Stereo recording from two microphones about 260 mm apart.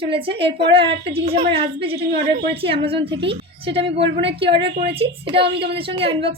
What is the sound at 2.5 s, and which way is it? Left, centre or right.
A woman's voice, right.